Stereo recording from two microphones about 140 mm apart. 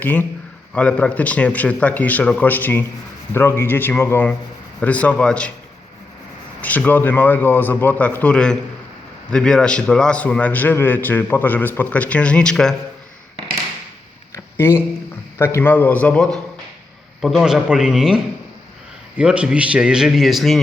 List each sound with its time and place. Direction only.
0.0 s a man's voice: 10° left (ahead or behind)
6.6 s a man's voice: 10° left (ahead or behind)
14.3 s a sound: 15° left (ahead or behind)
15.4 s a man's voice: 15° left (ahead or behind); by 20.6 s centre (ahead or behind)